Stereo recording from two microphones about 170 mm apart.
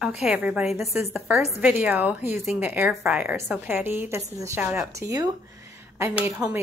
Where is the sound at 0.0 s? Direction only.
5° right (ahead or behind).